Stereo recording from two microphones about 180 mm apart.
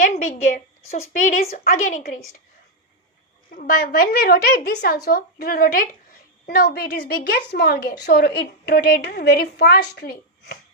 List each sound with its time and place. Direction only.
0.0 s a woman's voice: 45° left (ahead or behind)
3.5 s a woman's voice: 55° left (ahead or behind)